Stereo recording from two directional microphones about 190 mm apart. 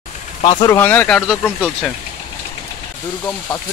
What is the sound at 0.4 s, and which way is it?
Speech, 20° left (ahead or behind).